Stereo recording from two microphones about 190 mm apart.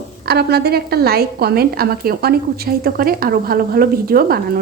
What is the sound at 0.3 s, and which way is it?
A woman's voice, 60° right (ahead or behind).